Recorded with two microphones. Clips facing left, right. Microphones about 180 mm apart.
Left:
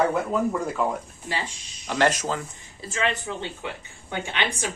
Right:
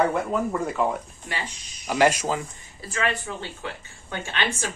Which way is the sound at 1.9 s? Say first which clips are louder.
Right 2 dB; 10° right (ahead or behind).